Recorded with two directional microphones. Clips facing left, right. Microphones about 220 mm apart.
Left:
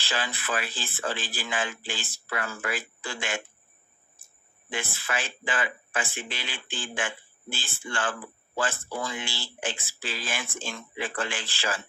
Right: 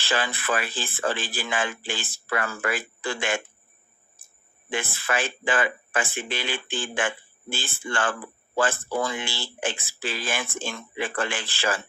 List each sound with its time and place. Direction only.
0.0 s speech: 55° right (ahead or behind)
4.7 s speech: 55° right (ahead or behind)